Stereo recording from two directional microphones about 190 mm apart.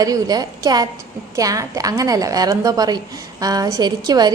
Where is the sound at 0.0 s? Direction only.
20° right (ahead or behind).